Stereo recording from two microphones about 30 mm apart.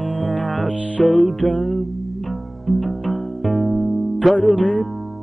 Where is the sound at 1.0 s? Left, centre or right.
Centre.